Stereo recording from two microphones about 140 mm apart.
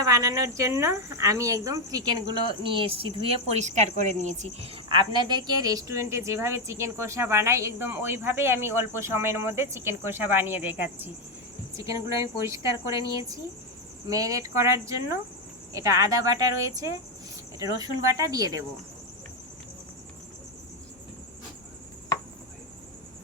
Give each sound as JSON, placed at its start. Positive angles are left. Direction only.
{"t": 0.0, "sound": "speech", "side_deg": -25}